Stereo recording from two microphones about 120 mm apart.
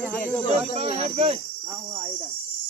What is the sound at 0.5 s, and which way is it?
Speech, 60° right (ahead or behind).